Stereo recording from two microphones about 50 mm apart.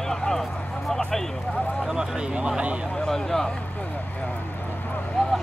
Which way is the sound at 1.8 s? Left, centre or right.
Centre.